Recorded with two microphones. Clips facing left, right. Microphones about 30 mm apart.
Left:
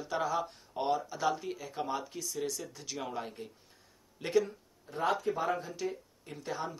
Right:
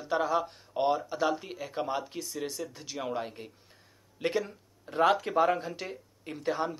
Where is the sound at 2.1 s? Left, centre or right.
Right.